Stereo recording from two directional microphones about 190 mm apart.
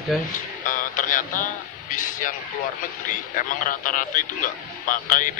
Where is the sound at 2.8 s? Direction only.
45° left (ahead or behind).